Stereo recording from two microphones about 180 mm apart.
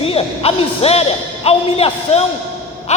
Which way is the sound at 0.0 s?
30° left (ahead or behind).